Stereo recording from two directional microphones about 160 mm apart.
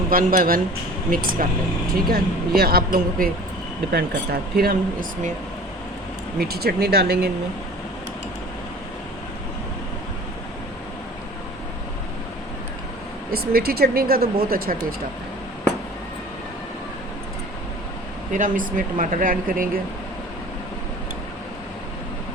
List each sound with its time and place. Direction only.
0.1 s speech: 60° right (ahead or behind)
6.4 s speech: 75° right (ahead or behind)
13.3 s speech: 75° right (ahead or behind)
18.3 s speech: 60° right (ahead or behind)